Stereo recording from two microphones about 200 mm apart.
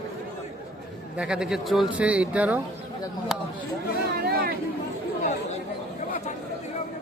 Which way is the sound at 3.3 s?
Centre (ahead or behind).